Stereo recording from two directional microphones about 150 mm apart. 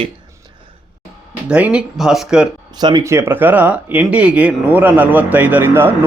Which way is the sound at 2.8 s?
25° right (ahead or behind).